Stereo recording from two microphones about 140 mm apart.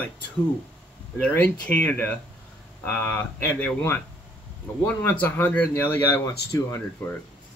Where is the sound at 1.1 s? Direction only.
10° left (ahead or behind).